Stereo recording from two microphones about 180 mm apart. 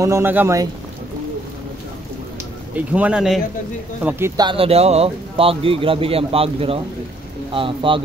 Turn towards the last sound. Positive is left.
turn(degrees=-30)  # may be behind; listen again after turning